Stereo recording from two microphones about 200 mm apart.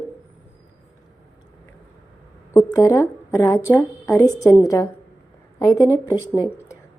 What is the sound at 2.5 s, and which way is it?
A woman's voice, 15° left (ahead or behind).